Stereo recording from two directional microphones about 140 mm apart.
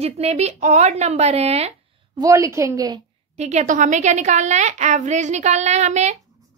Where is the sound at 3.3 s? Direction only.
55° right (ahead or behind).